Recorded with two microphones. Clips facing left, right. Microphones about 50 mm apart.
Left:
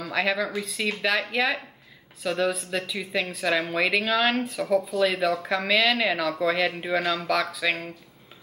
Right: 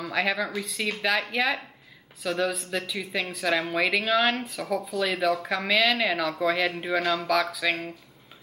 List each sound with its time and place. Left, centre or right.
0.1 s speech: centre